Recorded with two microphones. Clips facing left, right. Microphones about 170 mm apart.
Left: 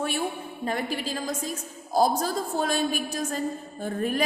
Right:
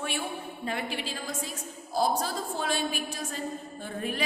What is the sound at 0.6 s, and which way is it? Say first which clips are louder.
A woman's voice: left 5 dB; 40° left (ahead or behind).